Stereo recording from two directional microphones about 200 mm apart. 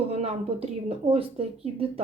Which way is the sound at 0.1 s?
30° right (ahead or behind).